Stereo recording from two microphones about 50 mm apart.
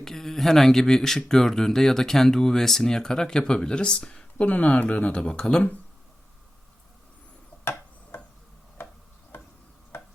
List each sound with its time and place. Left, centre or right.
0.0 s speech: centre
4.4 s speech: left
5.2 s speech: centre
7.6 s tick-tock: left
9.3 s tick-tock: left